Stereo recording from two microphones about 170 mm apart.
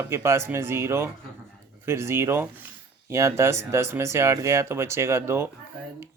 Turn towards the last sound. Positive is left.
turn(degrees=-15)  # may be behind; listen again after turning